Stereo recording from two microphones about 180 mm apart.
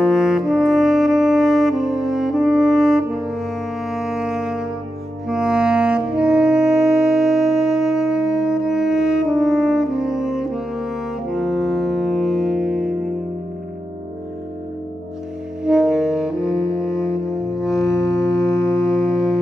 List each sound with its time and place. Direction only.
0.0 s brass instrument: centre (ahead or behind)
5.3 s saxophone: 5° right (ahead or behind)
15.6 s music: 5° right (ahead or behind)
16.9 s music: 15° left (ahead or behind)
17.6 s music: centre (ahead or behind)
18.1 s music: 15° left (ahead or behind)
18.8 s music: centre (ahead or behind)